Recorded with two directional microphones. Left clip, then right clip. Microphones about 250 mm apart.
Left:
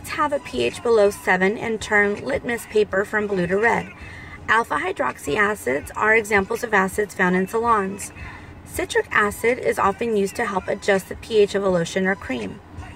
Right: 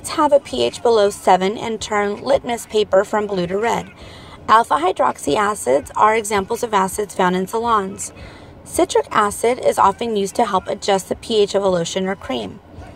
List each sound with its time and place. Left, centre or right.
0.1 s speech: right